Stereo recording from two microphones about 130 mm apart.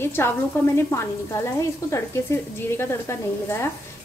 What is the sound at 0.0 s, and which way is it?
Speech, 20° left (ahead or behind).